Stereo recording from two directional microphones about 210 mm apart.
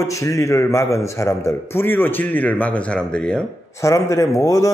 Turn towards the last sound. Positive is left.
turn(degrees=15)  # may be behind; listen again after turning